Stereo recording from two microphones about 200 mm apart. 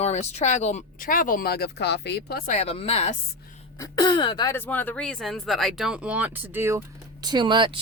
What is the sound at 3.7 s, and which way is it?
Speech, 20° left (ahead or behind).